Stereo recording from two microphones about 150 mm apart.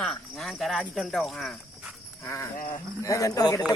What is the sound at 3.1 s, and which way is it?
Speech, 20° left (ahead or behind).